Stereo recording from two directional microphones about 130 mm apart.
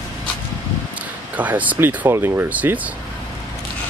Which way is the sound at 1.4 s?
10° right (ahead or behind).